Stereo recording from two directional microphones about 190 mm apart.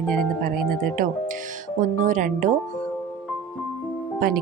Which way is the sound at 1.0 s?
45° right (ahead or behind).